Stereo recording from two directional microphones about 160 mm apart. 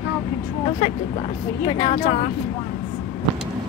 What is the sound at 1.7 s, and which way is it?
Speech, 30° left (ahead or behind).